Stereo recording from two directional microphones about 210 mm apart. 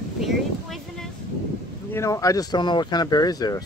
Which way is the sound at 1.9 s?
15° left (ahead or behind).